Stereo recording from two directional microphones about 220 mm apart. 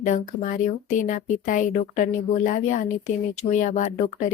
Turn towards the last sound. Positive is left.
turn(degrees=35)  # may be behind; listen again after turning